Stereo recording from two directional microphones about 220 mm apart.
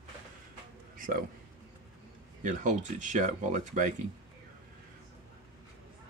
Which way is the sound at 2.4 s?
35° right (ahead or behind).